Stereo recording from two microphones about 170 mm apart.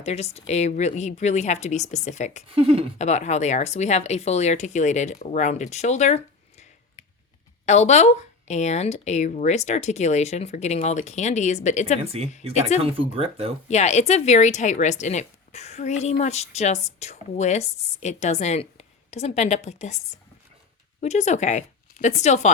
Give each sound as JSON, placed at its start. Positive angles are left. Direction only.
{"t": 0.0, "sound": "speech", "side_deg": 40}
{"t": 2.6, "sound": "speech", "side_deg": -35}
{"t": 3.0, "sound": "speech", "side_deg": 40}
{"t": 12.1, "sound": "speech", "side_deg": -40}
{"t": 13.7, "sound": "speech", "side_deg": 40}
{"t": 21.0, "sound": "speech", "side_deg": 40}